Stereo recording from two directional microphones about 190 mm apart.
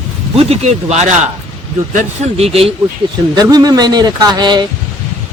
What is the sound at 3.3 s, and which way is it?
Speech, 20° right (ahead or behind).